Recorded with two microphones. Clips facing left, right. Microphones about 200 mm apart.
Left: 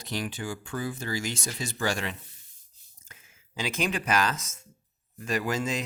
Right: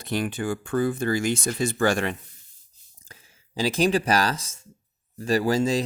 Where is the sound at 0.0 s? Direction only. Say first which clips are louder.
Right 6 dB; 55° right (ahead or behind).